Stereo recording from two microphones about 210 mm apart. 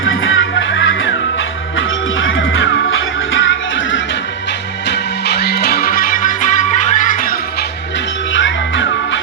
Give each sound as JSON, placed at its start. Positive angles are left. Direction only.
{"t": 0.0, "sound": "music", "side_deg": 65}
{"t": 2.2, "sound": "music", "side_deg": 65}
{"t": 4.9, "sound": "music", "side_deg": 50}
{"t": 8.3, "sound": "music", "side_deg": 60}